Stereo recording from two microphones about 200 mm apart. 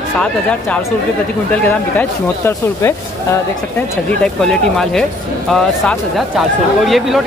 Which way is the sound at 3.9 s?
5° left (ahead or behind).